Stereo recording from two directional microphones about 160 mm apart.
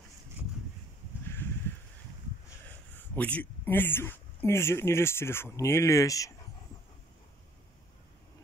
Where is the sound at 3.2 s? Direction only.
10° left (ahead or behind).